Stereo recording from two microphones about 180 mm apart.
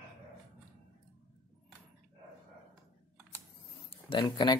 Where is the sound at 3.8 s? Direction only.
30° left (ahead or behind).